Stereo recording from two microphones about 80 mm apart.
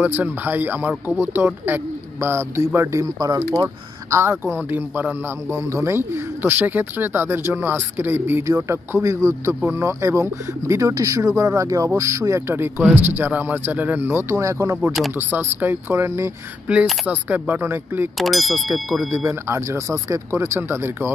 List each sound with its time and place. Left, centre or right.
0.0 s speech: right
3.2 s speech: right
5.5 s speech: right
8.5 s speech: right
15.1 s speech: right
16.8 s speech: centre
17.1 s speech: right
18.1 s speech: centre
19.1 s speech: right